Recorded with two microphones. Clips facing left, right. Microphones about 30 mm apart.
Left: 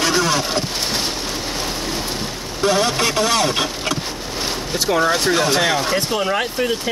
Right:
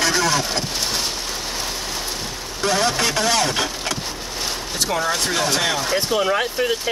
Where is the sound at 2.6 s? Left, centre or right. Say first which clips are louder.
Left 2 dB; centre.